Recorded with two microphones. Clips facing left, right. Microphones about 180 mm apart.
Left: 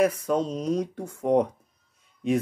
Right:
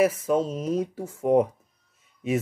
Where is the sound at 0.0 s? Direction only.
5° right (ahead or behind).